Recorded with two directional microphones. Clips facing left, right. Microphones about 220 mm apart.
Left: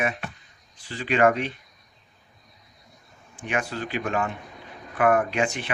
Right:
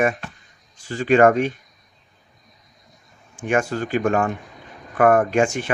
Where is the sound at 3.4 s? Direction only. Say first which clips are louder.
Right 7 dB; 45° right (ahead or behind).